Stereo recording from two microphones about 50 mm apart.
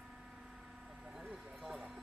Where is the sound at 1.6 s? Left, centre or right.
Centre.